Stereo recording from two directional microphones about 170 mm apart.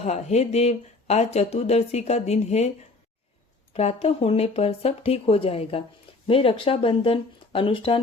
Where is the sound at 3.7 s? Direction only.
40° left (ahead or behind).